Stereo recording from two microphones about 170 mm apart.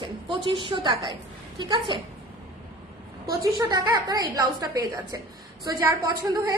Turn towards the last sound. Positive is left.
turn(degrees=-20)  # may be behind; listen again after turning